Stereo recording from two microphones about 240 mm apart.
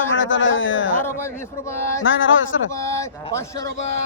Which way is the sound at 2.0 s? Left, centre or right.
Left.